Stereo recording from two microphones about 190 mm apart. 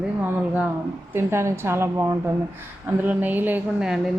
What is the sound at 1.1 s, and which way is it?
A woman's voice, 15° right (ahead or behind).